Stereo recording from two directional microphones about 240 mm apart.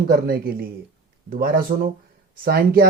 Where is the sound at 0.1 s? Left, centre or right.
Right.